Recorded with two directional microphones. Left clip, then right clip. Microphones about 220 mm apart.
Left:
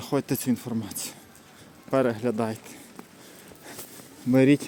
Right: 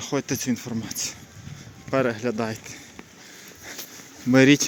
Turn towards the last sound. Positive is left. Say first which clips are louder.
# right 4 dB
turn(degrees=-5)  # may be behind; listen again after turning